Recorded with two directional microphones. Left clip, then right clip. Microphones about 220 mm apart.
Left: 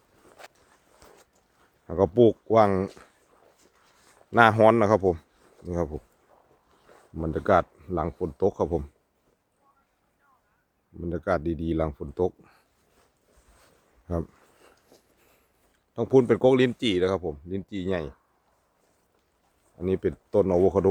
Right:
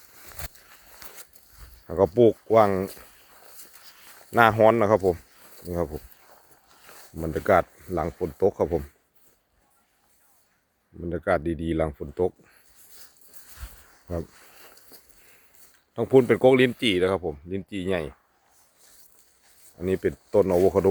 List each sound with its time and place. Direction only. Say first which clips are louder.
0.3 s a sound: right 5 dB; 55° right (ahead or behind)
1.9 s speech: right 1 dB; 10° left (ahead or behind)
4.3 s speech: even; 15° left (ahead or behind)
7.2 s speech: right 1 dB; 10° left (ahead or behind)
11.0 s speech: right 2 dB; 5° left (ahead or behind)
14.9 s walk: right 4 dB; 55° right (ahead or behind)
16.0 s speech: right 2 dB; centre (ahead or behind)
19.8 s speech: right 1 dB; 5° left (ahead or behind)